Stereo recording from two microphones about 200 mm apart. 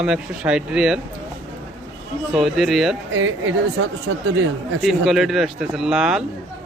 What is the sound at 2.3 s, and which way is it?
Speech, centre (ahead or behind).